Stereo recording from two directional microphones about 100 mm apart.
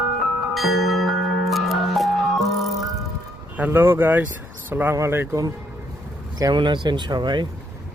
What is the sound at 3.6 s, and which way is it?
Speech, 20° right (ahead or behind).